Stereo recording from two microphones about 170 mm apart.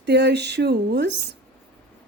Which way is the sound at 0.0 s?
85° right.